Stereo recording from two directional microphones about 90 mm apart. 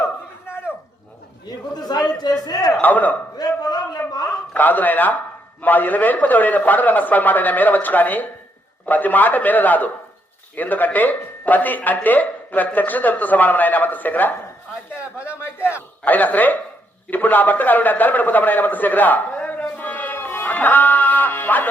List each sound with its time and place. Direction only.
1.5 s a man's voice: 50° left (ahead or behind)
2.8 s a man's voice: 20° left (ahead or behind)
3.3 s a sound: 45° left (ahead or behind)
4.5 s a man's voice: 20° left (ahead or behind)
15.5 s a man's voice: 25° left (ahead or behind)